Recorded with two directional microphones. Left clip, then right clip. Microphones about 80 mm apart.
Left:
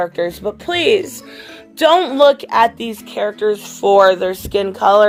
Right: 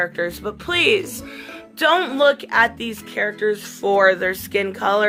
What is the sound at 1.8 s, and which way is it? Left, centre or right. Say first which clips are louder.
Speech: left 5 dB; left.